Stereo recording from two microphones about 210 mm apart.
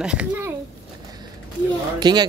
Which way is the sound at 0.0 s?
5° right (ahead or behind).